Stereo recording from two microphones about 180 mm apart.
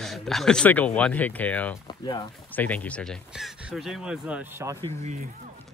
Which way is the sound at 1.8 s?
25° left (ahead or behind).